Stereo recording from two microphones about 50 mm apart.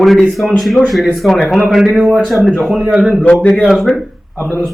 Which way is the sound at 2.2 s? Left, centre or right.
Centre.